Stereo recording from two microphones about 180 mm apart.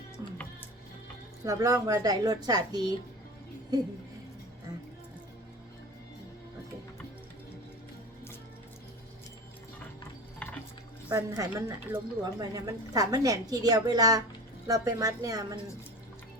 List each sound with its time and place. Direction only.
0.2 s music: 20° right (ahead or behind)
1.5 s a woman's voice: 20° right (ahead or behind)
10.4 s music: 5° left (ahead or behind)
11.1 s a woman's voice: 15° right (ahead or behind)